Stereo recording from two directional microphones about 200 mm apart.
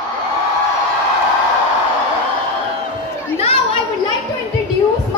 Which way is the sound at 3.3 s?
30° left (ahead or behind).